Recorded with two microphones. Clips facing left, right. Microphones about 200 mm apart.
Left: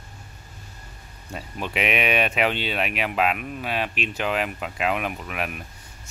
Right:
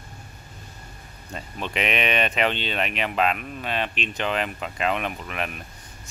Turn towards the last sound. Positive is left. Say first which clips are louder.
# left 1 dB
turn(degrees=5)  # may be behind; listen again after turning